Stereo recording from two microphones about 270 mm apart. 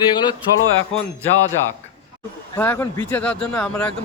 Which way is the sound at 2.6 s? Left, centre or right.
Centre.